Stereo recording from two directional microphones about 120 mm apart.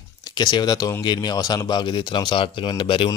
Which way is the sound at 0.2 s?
35° left (ahead or behind).